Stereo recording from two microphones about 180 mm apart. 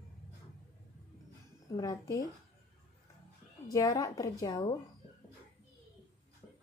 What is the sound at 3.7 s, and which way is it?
Speech, 20° left (ahead or behind).